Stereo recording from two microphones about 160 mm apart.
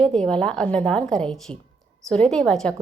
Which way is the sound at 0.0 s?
5° left (ahead or behind).